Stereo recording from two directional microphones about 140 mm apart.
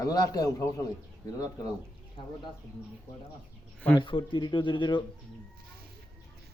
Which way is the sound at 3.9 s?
35° left (ahead or behind).